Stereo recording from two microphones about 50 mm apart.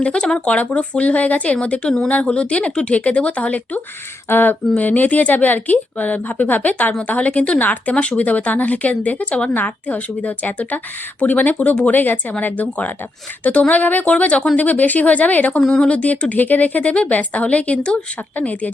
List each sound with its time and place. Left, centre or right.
0.0 s speech: centre
4.3 s speech: left
15.6 s speech: centre